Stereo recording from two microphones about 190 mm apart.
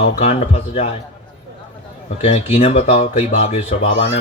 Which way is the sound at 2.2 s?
35° left (ahead or behind).